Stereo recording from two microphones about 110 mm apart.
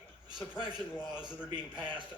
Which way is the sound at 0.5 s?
40° right (ahead or behind).